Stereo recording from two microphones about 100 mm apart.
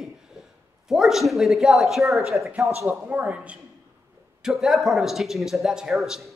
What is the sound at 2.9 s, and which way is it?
Speech, 15° right (ahead or behind).